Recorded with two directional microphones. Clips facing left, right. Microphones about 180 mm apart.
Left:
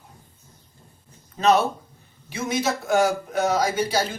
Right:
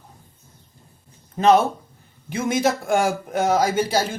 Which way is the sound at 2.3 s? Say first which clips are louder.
Right 4 dB; 50° right (ahead or behind).